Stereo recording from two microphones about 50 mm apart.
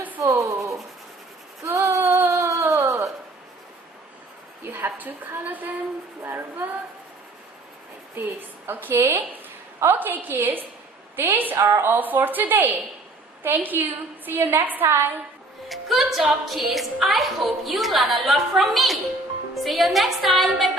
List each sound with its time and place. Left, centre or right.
0.2 s writing: right
1.6 s a sound: right
4.9 s a woman's voice: right
8.1 s a woman's voice: right
15.7 s a woman's voice: centre